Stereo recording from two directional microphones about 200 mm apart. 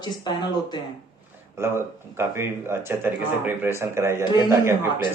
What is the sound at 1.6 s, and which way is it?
Speech, 15° right (ahead or behind).